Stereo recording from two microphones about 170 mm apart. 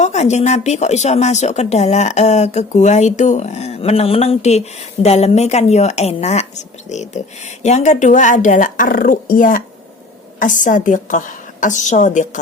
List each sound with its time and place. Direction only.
0.0 s a woman's voice: 40° left (ahead or behind)